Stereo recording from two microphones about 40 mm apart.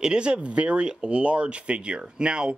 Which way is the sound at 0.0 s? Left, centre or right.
Right.